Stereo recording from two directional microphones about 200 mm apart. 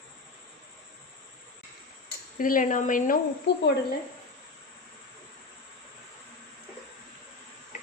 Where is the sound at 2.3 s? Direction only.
45° left (ahead or behind).